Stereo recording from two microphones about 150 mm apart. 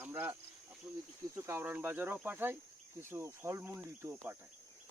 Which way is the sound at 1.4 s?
15° right (ahead or behind).